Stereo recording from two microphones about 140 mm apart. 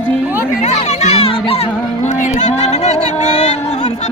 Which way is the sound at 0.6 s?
55° left (ahead or behind).